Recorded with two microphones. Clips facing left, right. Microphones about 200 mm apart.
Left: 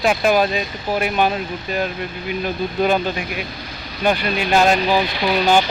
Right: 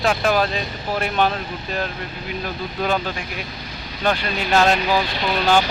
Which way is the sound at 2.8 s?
20° left (ahead or behind).